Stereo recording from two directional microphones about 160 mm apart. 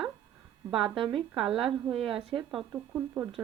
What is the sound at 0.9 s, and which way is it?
Speech, 35° right (ahead or behind).